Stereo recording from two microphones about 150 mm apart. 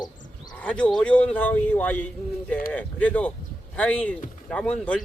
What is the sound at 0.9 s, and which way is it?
Speech, 5° left (ahead or behind).